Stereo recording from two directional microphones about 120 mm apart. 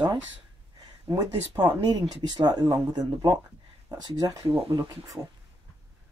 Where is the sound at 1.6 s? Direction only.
35° right (ahead or behind).